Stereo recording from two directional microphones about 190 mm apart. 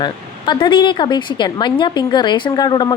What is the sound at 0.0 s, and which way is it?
A woman's voice, 25° left (ahead or behind).